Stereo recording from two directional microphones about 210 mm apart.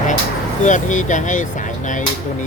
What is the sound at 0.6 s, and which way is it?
Speech, 35° left (ahead or behind).